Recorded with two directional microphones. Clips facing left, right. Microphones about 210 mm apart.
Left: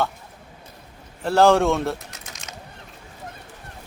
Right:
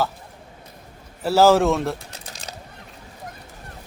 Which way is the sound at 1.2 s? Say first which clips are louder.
Right 1 dB; 5° right (ahead or behind).